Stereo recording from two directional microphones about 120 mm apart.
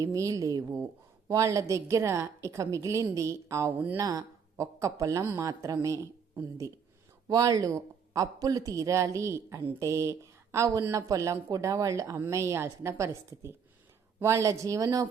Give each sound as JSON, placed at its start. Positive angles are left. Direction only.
{"t": 0.0, "sound": "speech", "side_deg": -30}
{"t": 14.2, "sound": "speech", "side_deg": -25}